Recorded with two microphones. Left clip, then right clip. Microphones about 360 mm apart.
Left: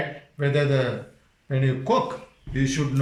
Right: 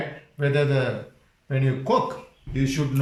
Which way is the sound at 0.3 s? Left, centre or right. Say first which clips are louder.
Even; centre.